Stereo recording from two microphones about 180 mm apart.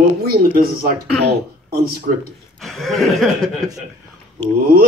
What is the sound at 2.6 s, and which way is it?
Chuckle, centre (ahead or behind).